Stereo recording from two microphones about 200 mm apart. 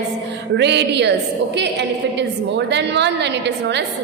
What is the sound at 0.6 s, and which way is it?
A woman's voice, 60° right (ahead or behind).